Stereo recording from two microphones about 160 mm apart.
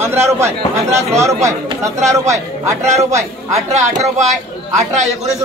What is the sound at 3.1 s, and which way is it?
Speech, 20° right (ahead or behind).